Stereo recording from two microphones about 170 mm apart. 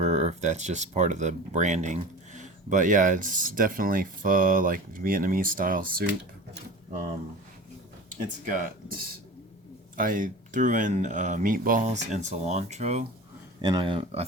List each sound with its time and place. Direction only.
0.0 s speech: 40° right (ahead or behind)
8.4 s speech: 50° right (ahead or behind)
10.0 s speech: 50° right (ahead or behind)
13.6 s speech: 30° right (ahead or behind)